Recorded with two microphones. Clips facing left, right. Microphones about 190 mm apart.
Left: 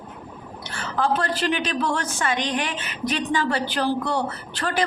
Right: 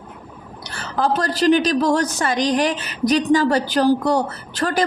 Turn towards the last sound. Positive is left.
turn(degrees=-40)  # may be behind; listen again after turning